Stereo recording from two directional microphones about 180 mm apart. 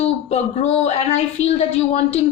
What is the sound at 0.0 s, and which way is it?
A woman's voice, 35° left (ahead or behind).